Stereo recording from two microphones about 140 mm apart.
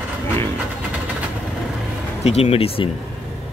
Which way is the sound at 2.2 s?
45° left (ahead or behind).